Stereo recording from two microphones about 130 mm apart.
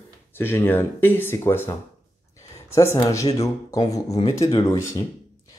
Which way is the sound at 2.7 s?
25° left (ahead or behind).